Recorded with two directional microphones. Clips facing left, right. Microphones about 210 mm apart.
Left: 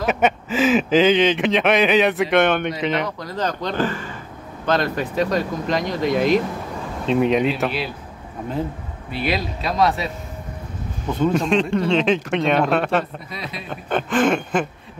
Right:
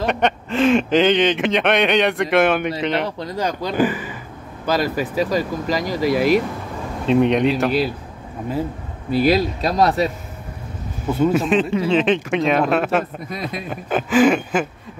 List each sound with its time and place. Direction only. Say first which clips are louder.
0.0 s speech: even; 5° left (ahead or behind)
3.3 s speech: right 3 dB; 10° right (ahead or behind)
9.1 s speech: right 8 dB; 40° right (ahead or behind)
11.1 s speech: right 2 dB; 5° right (ahead or behind)
13.3 s a man's voice: right 5 dB; 50° right (ahead or behind)
13.7 s speech: even; 5° right (ahead or behind)